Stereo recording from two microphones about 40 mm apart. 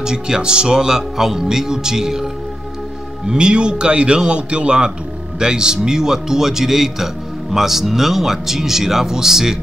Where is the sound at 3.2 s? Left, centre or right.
Right.